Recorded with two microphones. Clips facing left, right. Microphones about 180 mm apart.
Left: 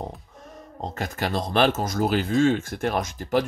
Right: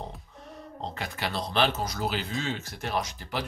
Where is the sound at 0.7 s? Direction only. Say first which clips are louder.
Left 6 dB; 45° left (ahead or behind).